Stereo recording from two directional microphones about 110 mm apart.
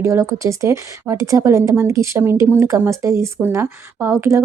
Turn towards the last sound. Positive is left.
turn(degrees=-25)  # may be behind; listen again after turning